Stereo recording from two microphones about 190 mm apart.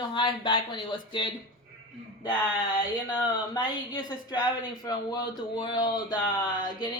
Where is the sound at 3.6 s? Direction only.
20° left (ahead or behind).